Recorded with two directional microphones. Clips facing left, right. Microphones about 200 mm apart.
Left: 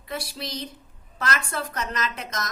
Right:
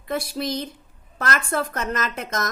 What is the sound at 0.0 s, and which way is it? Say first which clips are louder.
A woman's voice: right 7 dB; 50° right (ahead or behind).